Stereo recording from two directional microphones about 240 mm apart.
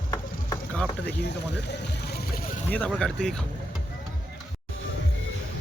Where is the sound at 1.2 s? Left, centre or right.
Left.